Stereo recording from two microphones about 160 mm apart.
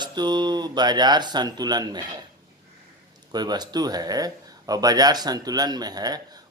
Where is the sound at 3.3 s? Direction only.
25° right (ahead or behind).